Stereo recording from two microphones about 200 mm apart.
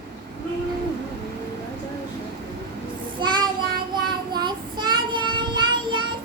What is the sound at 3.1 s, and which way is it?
Child singing, 20° right (ahead or behind).